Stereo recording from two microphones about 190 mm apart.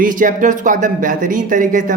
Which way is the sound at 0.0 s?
45° right (ahead or behind).